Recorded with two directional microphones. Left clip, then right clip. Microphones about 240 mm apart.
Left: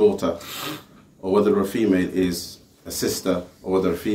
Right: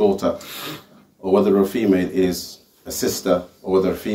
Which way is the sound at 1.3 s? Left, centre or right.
Centre.